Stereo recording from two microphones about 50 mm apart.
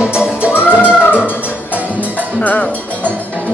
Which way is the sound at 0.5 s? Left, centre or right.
Left.